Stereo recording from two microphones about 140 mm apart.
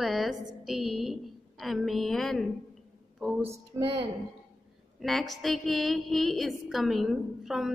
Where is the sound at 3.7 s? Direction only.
25° right (ahead or behind).